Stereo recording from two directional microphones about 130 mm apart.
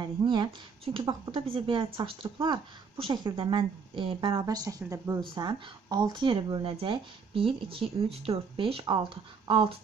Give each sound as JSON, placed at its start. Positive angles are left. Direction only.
{"t": 0.0, "sound": "speech", "side_deg": -35}
{"t": 5.3, "sound": "speech", "side_deg": -35}